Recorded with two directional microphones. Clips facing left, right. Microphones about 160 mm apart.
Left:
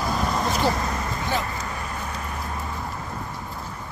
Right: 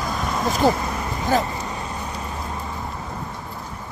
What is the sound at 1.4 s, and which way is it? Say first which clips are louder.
Vehicle: right 3 dB; 20° right (ahead or behind).